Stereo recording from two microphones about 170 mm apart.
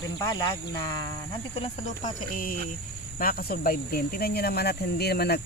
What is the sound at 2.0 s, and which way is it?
Speech, 55° left (ahead or behind).